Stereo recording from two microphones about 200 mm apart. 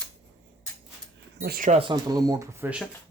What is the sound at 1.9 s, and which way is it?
Speech, 20° right (ahead or behind).